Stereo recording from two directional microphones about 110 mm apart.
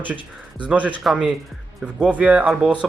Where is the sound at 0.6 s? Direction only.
15° right (ahead or behind).